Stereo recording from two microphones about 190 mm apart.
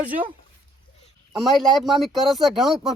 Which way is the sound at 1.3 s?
Centre (ahead or behind).